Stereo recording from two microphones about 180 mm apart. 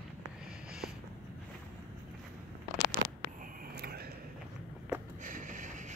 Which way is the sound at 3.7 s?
60° right (ahead or behind).